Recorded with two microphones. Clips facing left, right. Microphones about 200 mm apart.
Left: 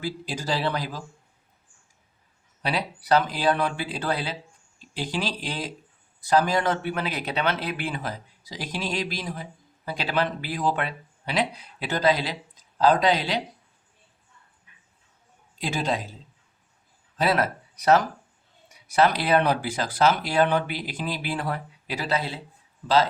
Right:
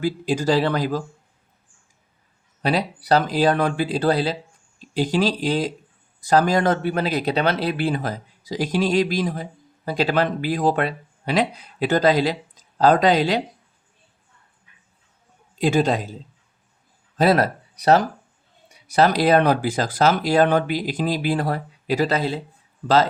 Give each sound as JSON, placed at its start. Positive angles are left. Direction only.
{"t": 0.0, "sound": "speech", "side_deg": -50}
{"t": 2.6, "sound": "speech", "side_deg": -45}
{"t": 15.5, "sound": "a man's voice", "side_deg": -45}
{"t": 17.2, "sound": "speech", "side_deg": -40}